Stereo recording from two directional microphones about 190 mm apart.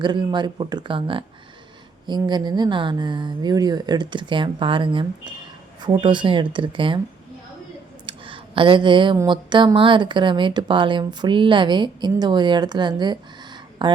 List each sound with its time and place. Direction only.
0.0 s speech: 25° right (ahead or behind)
8.0 s speech: 25° right (ahead or behind)